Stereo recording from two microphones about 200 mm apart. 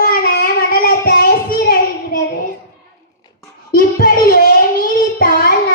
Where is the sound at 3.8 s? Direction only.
50° left (ahead or behind).